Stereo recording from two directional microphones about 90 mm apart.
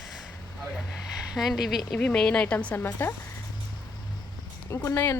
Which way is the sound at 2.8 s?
25° left (ahead or behind).